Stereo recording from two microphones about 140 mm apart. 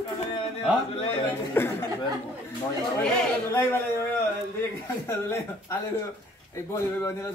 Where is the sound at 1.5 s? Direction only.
15° left (ahead or behind).